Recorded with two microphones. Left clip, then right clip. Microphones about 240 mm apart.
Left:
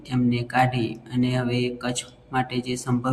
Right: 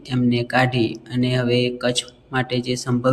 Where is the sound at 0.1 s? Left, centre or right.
Centre.